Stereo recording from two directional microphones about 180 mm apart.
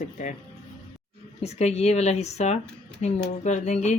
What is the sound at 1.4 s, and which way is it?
Speech, 35° left (ahead or behind).